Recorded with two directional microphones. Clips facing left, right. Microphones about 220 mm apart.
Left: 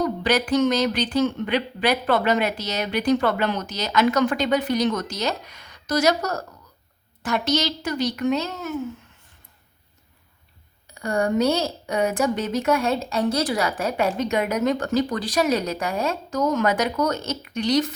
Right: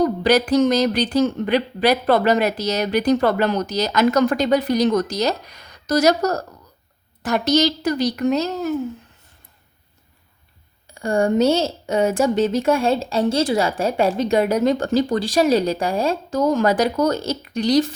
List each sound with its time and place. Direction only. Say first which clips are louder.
0.0 s speech: right 5 dB; 40° right (ahead or behind)
10.9 s speech: right 4 dB; 30° right (ahead or behind)